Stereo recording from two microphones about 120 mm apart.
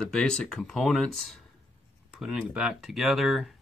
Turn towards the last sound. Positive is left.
turn(degrees=0)  # may be behind; listen again after turning